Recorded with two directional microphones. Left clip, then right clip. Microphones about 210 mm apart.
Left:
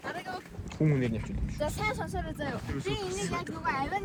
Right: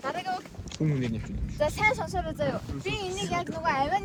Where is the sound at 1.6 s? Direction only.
30° right (ahead or behind).